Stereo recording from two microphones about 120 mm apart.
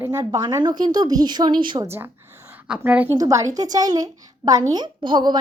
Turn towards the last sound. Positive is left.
turn(degrees=-40)  # may be behind; listen again after turning